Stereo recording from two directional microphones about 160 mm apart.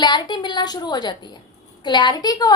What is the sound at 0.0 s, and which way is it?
A woman's voice, 25° left (ahead or behind).